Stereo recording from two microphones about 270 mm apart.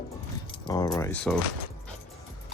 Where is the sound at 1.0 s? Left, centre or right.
Centre.